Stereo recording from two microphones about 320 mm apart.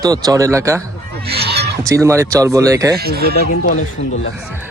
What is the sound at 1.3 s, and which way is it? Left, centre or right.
Honk, right.